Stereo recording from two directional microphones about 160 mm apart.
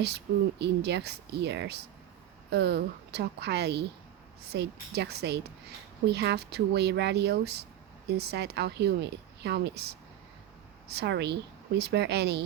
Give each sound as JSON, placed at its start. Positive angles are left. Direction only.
{"t": 0.6, "sound": "a woman's voice", "side_deg": -90}